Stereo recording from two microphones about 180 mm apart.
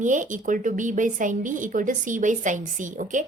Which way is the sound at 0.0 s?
45° right (ahead or behind).